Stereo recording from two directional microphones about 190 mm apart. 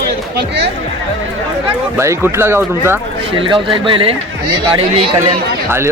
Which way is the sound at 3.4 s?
25° right (ahead or behind).